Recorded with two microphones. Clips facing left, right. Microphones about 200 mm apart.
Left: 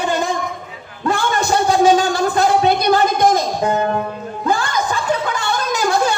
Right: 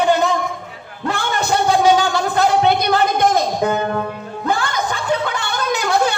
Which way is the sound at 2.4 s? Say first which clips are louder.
Right 1 dB; 60° right (ahead or behind).